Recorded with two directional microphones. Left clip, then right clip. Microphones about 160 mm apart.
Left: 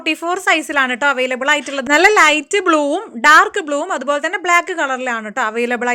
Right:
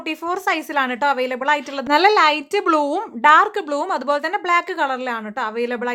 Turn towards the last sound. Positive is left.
turn(degrees=25)  # may be behind; listen again after turning